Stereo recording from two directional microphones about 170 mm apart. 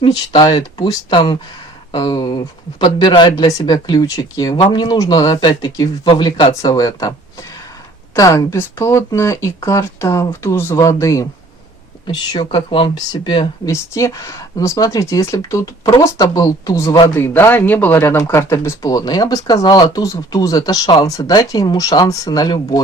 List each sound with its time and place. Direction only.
0.0 s speech: 25° left (ahead or behind)
8.1 s speech: 20° left (ahead or behind)
13.7 s speech: 20° left (ahead or behind)